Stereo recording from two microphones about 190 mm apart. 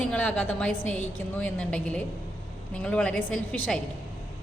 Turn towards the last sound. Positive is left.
turn(degrees=5)  # may be behind; listen again after turning